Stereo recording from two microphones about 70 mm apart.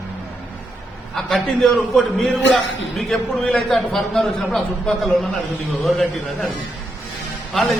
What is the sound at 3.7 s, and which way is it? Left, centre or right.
A man's voice, centre.